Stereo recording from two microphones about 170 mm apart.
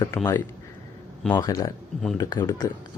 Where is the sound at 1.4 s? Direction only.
20° left (ahead or behind).